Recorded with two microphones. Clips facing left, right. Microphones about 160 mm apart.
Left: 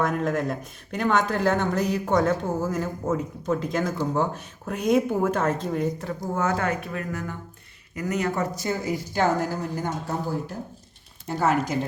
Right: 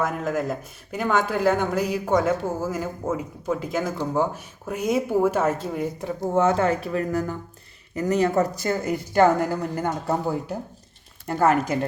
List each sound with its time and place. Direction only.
0.0 s speech: centre (ahead or behind)
6.3 s speech: 25° right (ahead or behind)
8.6 s a woman's voice: 55° right (ahead or behind)
11.3 s a woman's voice: 55° right (ahead or behind)